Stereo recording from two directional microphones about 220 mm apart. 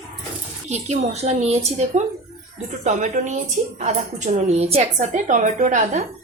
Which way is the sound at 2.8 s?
35° right (ahead or behind).